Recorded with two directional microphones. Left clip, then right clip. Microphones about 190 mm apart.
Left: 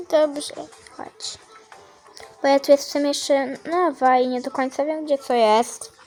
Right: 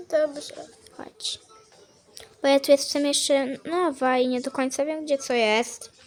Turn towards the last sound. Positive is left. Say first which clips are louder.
# left 5 dB
turn(degrees=0)  # may be behind; listen again after turning